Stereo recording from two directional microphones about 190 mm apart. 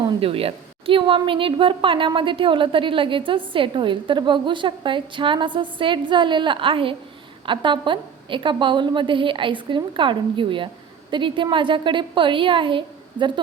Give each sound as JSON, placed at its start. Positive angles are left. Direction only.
{"t": 0.0, "sound": "a woman's voice", "side_deg": -25}